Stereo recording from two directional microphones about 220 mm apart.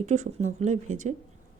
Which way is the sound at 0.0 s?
30° right (ahead or behind).